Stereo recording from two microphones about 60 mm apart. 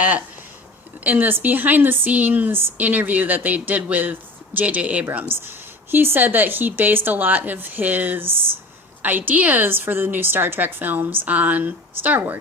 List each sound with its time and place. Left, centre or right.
1.0 s speech: right
2.7 s speech: right
5.3 s a woman's voice: right